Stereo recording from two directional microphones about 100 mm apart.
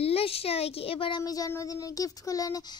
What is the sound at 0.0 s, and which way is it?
Speech, 75° left (ahead or behind).